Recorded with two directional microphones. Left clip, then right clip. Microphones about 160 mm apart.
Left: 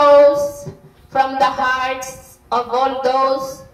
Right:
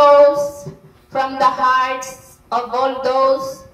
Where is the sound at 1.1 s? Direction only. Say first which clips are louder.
Left 1 dB; 45° left (ahead or behind).